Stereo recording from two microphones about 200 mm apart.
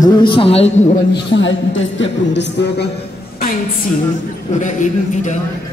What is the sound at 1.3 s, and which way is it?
A woman's voice, 70° left (ahead or behind).